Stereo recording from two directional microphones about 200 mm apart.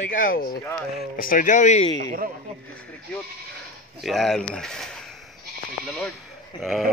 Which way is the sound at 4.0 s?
Centre (ahead or behind).